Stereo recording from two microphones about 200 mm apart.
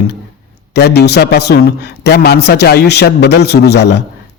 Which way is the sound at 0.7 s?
55° left (ahead or behind).